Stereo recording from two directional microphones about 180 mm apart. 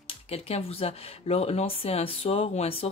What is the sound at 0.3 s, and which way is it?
Speech, 35° left (ahead or behind).